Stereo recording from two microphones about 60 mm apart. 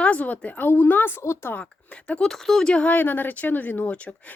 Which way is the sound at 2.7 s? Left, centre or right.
Left.